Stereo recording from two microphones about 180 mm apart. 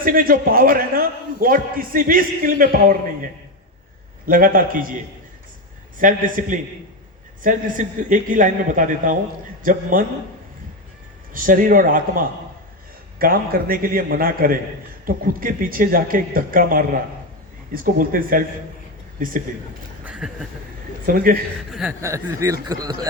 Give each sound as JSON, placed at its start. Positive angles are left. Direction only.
{"t": 0.0, "sound": "a man's voice", "side_deg": -50}
{"t": 4.3, "sound": "a man's voice", "side_deg": -50}
{"t": 6.0, "sound": "a man's voice", "side_deg": -50}
{"t": 11.3, "sound": "a man's voice", "side_deg": -50}
{"t": 20.1, "sound": "a sound", "side_deg": -5}
{"t": 21.1, "sound": "a man's voice", "side_deg": -55}
{"t": 21.7, "sound": "speech", "side_deg": -5}
{"t": 22.0, "sound": "speech", "side_deg": -15}